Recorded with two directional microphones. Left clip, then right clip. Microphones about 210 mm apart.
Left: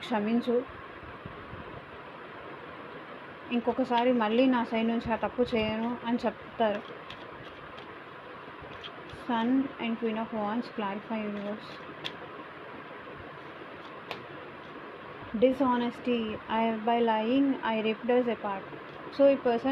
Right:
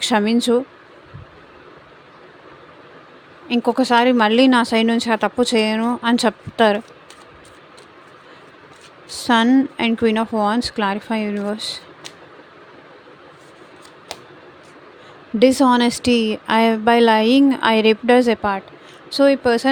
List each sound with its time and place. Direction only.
0.0 s a woman's voice: 60° right (ahead or behind)
3.5 s a woman's voice: 55° right (ahead or behind)
9.2 s a woman's voice: 60° right (ahead or behind)
15.4 s a woman's voice: 70° right (ahead or behind)